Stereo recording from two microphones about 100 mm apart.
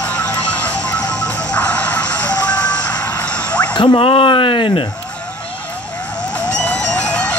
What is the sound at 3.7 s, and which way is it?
Speech, 60° left (ahead or behind).